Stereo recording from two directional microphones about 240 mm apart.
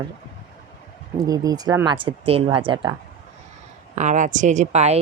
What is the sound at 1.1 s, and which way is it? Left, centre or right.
A woman's voice, centre.